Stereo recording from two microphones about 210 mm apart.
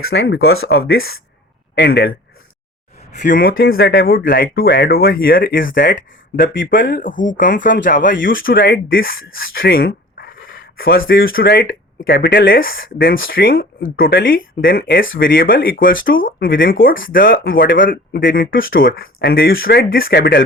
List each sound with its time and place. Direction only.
0.1 s speech: 55° left (ahead or behind)
0.7 s speech: 50° left (ahead or behind)
3.1 s speech: 40° left (ahead or behind)
9.6 s a sound: 45° left (ahead or behind)
11.1 s speech: 45° left (ahead or behind)